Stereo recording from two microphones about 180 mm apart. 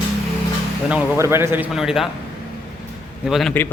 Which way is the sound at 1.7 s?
Centre (ahead or behind).